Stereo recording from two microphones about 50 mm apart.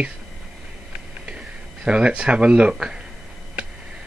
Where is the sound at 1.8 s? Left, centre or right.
Centre.